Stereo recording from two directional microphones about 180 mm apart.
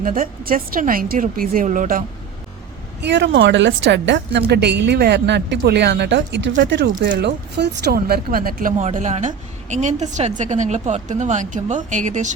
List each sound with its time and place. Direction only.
0.0 s speech: 50° right (ahead or behind)
3.0 s a woman's voice: 75° right (ahead or behind); by 12.3 s 40° right (ahead or behind)